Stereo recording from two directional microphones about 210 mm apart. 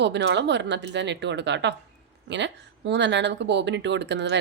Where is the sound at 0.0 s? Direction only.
55° right (ahead or behind).